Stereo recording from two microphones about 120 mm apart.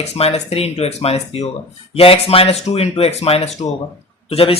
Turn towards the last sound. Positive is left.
turn(degrees=55)  # may be behind; listen again after turning